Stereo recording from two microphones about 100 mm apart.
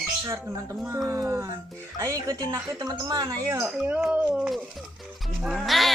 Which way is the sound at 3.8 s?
15° right (ahead or behind).